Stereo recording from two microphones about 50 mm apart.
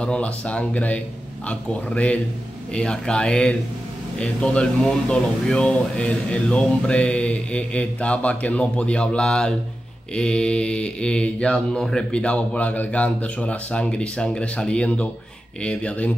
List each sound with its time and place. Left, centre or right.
0.0 s speech: left